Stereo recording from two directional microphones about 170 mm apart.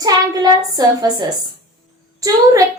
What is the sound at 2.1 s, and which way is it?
Speech, 20° right (ahead or behind).